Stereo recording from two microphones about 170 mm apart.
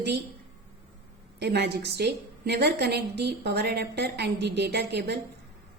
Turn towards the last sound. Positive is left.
turn(degrees=-75)  # may be behind; listen again after turning